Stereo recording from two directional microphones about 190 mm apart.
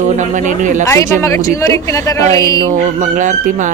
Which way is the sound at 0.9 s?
15° left (ahead or behind).